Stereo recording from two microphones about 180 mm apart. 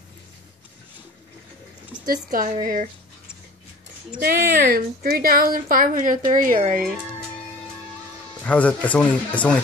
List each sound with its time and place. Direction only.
2.0 s a woman's voice: 50° right (ahead or behind)
4.2 s a woman's voice: 55° right (ahead or behind)
8.4 s speech: 10° left (ahead or behind)